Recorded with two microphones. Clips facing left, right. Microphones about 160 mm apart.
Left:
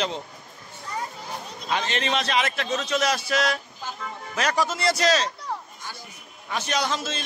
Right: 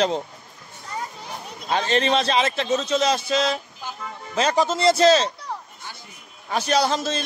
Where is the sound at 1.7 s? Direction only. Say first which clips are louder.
Right 5 dB; 35° right (ahead or behind).